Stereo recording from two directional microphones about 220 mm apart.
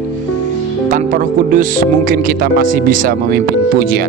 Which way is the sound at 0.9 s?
40° right (ahead or behind).